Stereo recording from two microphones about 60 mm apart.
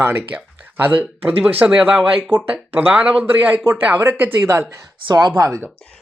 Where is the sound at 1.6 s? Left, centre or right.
Centre.